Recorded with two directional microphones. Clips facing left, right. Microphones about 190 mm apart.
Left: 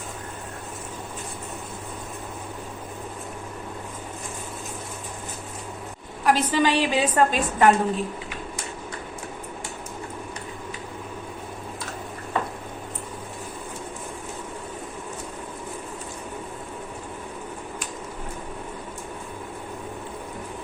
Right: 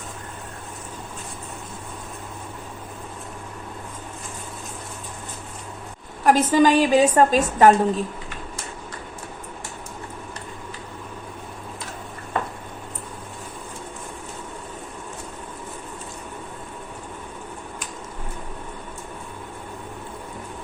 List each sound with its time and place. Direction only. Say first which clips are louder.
6.2 s a woman's voice: right 5 dB; 45° right (ahead or behind)